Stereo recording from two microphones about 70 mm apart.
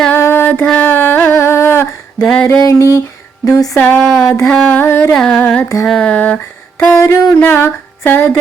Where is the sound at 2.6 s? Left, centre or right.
Left.